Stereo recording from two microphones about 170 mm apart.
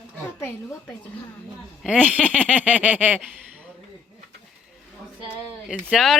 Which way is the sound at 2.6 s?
10° right (ahead or behind).